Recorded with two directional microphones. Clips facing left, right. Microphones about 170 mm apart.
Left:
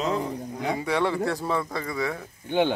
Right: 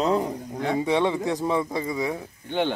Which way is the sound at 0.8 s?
20° right (ahead or behind).